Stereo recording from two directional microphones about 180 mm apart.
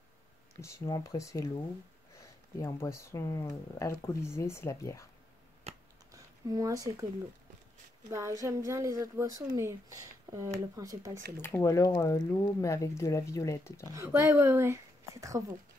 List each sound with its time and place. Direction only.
0.6 s speech: 15° left (ahead or behind)
2.6 s speech: 15° left (ahead or behind)
5.7 s a sound: 35° right (ahead or behind)
6.1 s speech: 20° right (ahead or behind)
8.1 s a woman's voice: 15° right (ahead or behind)
11.4 s speech: 15° left (ahead or behind)
13.9 s a woman's voice: 15° right (ahead or behind)